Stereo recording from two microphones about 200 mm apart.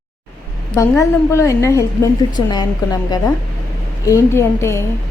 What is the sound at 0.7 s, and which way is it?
A woman's voice, 15° left (ahead or behind).